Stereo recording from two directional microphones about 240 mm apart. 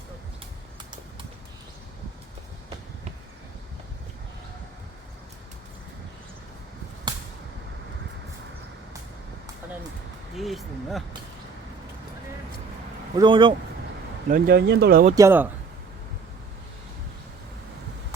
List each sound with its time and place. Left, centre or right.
10.3 s speech: centre
13.1 s speech: centre
14.3 s speech: right
15.1 s speech: centre